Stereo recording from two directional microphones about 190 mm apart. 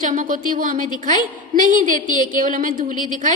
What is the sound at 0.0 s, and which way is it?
A woman's voice, 45° right (ahead or behind).